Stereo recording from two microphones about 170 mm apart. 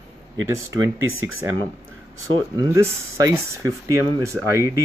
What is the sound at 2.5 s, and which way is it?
Speech, 20° right (ahead or behind).